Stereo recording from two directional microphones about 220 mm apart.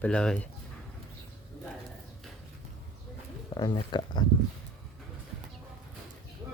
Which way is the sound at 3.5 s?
20° left (ahead or behind).